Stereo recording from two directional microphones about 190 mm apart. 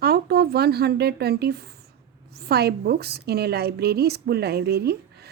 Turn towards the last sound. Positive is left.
turn(degrees=-55)  # may be behind; listen again after turning